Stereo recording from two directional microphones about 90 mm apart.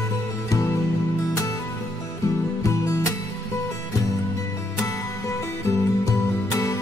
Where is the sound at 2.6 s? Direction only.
35° left (ahead or behind).